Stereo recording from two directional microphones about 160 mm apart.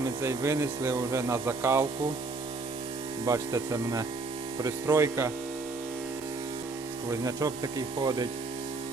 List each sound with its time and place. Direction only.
0.0 s speech: 20° right (ahead or behind)
3.2 s speech: 20° right (ahead or behind)
7.1 s speech: 20° right (ahead or behind)